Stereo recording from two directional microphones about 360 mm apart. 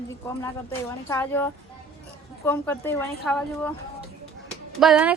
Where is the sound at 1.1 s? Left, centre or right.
Centre.